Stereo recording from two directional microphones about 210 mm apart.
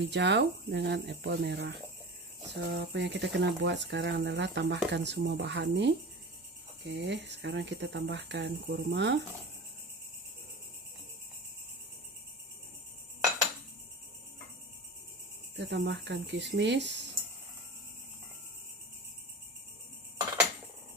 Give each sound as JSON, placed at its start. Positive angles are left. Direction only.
{"t": 0.0, "sound": "speech", "side_deg": -55}
{"t": 15.5, "sound": "speech", "side_deg": -55}